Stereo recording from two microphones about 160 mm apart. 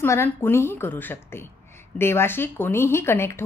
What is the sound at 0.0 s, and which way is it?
A woman's voice, 15° left (ahead or behind).